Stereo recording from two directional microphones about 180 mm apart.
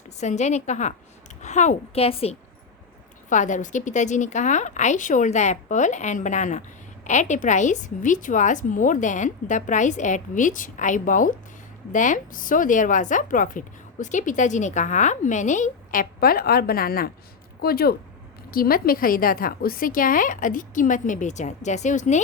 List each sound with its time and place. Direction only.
0.2 s a woman's voice: 40° left (ahead or behind)
3.2 s speech: 45° left (ahead or behind)